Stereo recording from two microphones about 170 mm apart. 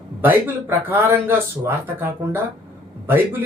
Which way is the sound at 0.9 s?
15° right (ahead or behind).